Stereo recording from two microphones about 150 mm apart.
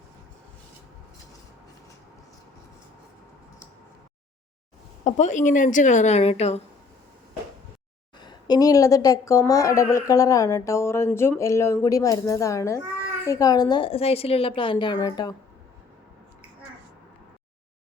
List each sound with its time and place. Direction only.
5.0 s speech: 55° left (ahead or behind)
8.2 s a woman's voice: 30° left (ahead or behind)